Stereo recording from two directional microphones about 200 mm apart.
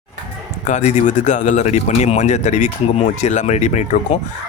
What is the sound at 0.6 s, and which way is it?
Speech, 35° left (ahead or behind).